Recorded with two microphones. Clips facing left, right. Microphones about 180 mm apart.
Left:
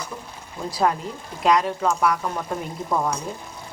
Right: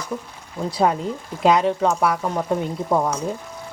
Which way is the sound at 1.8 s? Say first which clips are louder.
Right 2 dB; 25° right (ahead or behind).